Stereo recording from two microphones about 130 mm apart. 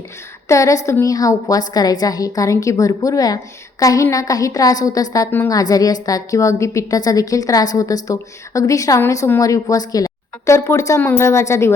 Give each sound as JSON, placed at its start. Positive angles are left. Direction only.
{"t": 0.4, "sound": "a woman's voice", "side_deg": 25}